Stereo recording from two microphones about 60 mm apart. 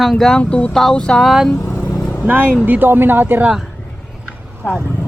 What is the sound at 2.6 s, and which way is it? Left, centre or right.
Speech, right.